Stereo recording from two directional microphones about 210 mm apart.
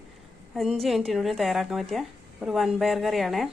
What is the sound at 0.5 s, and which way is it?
A woman's voice, centre (ahead or behind).